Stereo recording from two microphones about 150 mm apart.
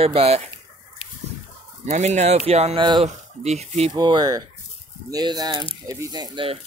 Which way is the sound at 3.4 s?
45° right (ahead or behind).